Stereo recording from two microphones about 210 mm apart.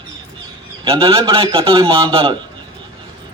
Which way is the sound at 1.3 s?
25° right (ahead or behind).